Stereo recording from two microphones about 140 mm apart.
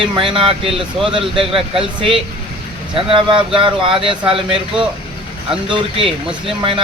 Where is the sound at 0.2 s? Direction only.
40° right (ahead or behind).